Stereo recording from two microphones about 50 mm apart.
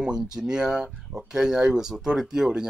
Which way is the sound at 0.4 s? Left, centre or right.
Centre.